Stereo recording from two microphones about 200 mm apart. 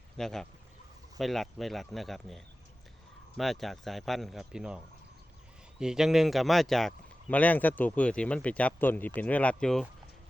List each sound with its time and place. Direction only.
0.2 s speech: centre (ahead or behind)
5.8 s speech: 5° right (ahead or behind)